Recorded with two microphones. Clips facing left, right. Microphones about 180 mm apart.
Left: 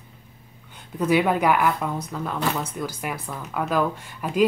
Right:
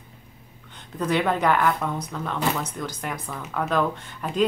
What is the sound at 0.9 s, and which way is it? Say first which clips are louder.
Speech: left 3 dB; 10° left (ahead or behind).